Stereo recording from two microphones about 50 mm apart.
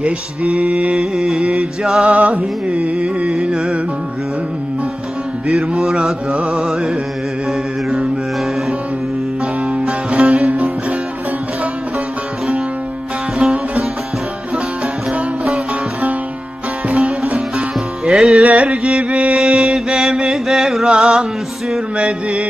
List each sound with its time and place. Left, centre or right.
0.0 s music: right
2.0 s carnatic music: right
5.5 s music: centre
9.7 s music: right
13.4 s music: centre
15.4 s music: right
16.9 s music: centre
17.3 s music: right
18.1 s music: centre
18.4 s carnatic music: right
19.0 s music: centre
20.9 s music: centre
21.9 s carnatic music: right